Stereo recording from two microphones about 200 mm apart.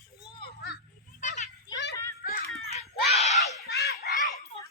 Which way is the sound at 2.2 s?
50° left (ahead or behind).